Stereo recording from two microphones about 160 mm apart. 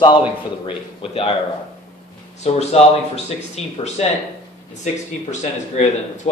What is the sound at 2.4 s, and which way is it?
Speech, 40° left (ahead or behind).